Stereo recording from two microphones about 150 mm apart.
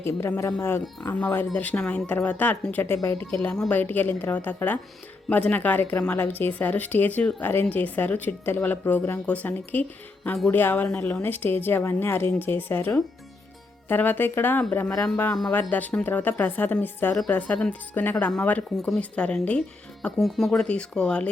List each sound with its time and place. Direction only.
0.0 s speech: 15° left (ahead or behind)